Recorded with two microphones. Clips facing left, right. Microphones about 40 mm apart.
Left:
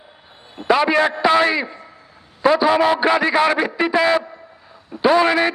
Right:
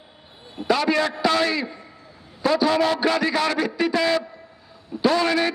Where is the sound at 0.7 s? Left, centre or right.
Left.